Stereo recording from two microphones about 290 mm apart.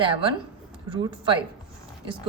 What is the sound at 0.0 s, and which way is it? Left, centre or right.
Speech, centre.